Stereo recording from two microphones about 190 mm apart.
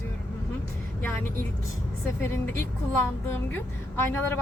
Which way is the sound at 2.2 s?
15° left (ahead or behind).